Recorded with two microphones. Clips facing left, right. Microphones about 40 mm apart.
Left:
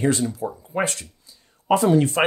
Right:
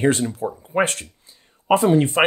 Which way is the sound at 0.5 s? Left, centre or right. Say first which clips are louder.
Right 4 dB; right.